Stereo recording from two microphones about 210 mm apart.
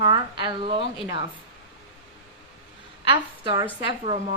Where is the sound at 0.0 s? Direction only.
25° right (ahead or behind).